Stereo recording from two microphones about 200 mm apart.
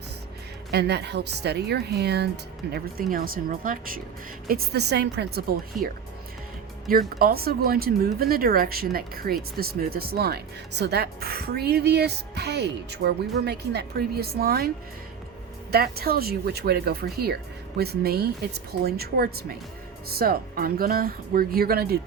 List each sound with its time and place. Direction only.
0.7 s speech: 55° right (ahead or behind)
7.2 s speech: 50° right (ahead or behind)
15.7 s speech: 50° right (ahead or behind)